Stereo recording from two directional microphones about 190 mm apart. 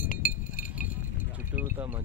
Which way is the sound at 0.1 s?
45° left (ahead or behind).